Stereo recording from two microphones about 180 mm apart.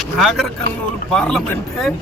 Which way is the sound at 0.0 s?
Centre (ahead or behind).